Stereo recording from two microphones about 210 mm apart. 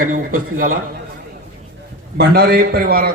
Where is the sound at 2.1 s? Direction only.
50° right (ahead or behind).